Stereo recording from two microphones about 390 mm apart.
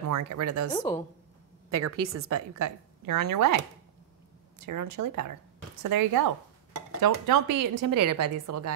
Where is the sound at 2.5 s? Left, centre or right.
Right.